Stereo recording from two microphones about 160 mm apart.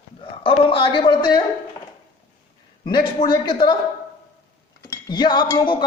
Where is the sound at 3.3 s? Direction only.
30° left (ahead or behind).